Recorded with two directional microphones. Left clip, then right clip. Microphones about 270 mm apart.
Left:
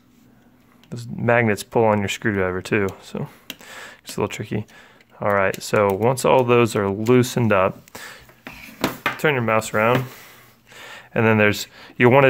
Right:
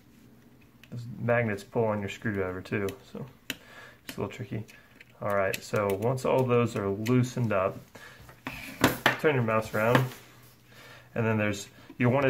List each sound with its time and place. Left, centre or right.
0.9 s speech: left
3.6 s a sound: left
5.2 s speech: left
9.2 s speech: left